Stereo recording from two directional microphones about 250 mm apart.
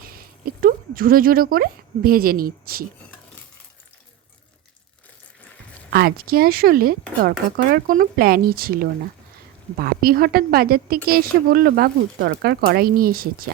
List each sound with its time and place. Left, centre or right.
0.0 s speech: right
5.9 s speech: right